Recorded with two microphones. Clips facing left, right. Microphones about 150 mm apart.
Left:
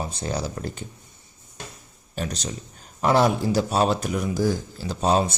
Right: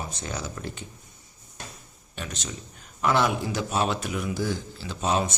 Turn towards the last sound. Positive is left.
turn(degrees=35)  # may be behind; listen again after turning